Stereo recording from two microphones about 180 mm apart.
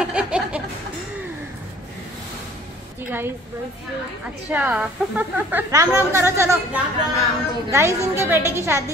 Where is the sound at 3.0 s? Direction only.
10° right (ahead or behind).